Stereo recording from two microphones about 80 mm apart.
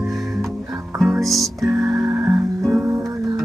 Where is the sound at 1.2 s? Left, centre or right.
Centre.